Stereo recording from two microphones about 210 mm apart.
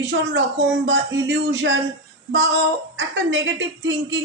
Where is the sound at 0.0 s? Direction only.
55° right (ahead or behind).